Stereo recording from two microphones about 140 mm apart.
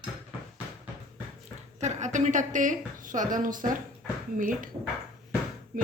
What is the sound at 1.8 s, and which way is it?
A woman's voice, 60° right (ahead or behind).